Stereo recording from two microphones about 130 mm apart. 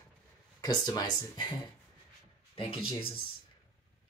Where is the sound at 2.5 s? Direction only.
45° left (ahead or behind).